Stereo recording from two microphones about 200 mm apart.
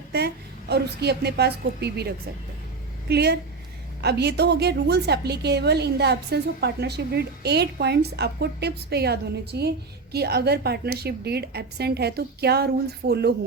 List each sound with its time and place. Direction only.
0.7 s a woman's voice: 55° right (ahead or behind)